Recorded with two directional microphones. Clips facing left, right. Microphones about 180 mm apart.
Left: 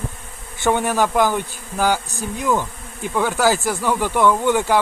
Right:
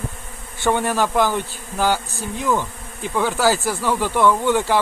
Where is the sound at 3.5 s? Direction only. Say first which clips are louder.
Left 1 dB; 15° left (ahead or behind).